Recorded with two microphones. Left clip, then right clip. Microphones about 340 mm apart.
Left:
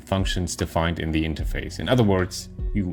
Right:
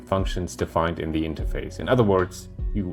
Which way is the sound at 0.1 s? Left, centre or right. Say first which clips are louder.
Even; left.